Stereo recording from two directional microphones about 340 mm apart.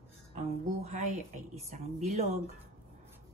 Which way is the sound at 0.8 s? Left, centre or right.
Centre.